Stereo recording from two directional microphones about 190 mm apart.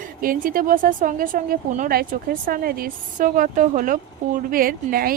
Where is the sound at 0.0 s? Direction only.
45° right (ahead or behind).